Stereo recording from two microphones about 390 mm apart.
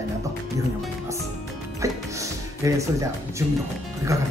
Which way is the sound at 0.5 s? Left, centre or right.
Centre.